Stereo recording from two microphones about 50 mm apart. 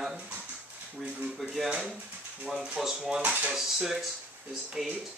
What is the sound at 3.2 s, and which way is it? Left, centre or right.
Speech, right.